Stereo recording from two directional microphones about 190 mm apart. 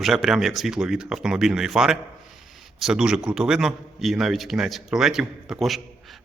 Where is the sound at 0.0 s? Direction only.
Centre (ahead or behind).